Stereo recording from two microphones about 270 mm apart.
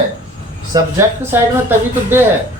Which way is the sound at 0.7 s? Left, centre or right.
Centre.